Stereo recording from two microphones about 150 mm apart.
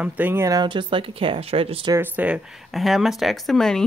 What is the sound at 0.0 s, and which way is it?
Speech, 15° right (ahead or behind).